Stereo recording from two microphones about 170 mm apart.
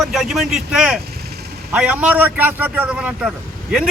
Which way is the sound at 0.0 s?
Centre (ahead or behind).